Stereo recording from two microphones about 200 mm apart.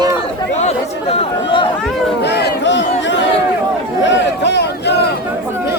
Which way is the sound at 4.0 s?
60° left (ahead or behind).